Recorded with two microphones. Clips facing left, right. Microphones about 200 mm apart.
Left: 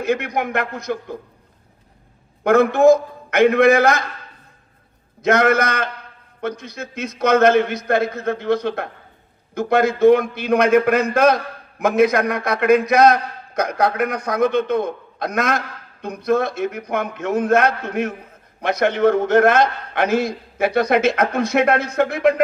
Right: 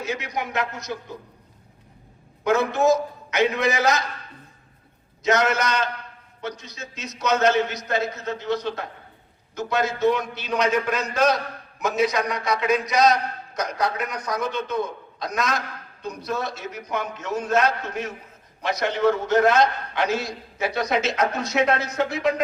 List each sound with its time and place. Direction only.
0.0 s a man's voice: 55° left (ahead or behind)
2.4 s a man's voice: 55° left (ahead or behind)
5.2 s a man's voice: 55° left (ahead or behind)